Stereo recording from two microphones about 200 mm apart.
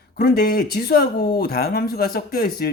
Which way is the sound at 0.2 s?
50° left (ahead or behind).